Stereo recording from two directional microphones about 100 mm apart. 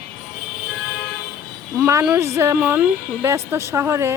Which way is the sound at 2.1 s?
30° right (ahead or behind).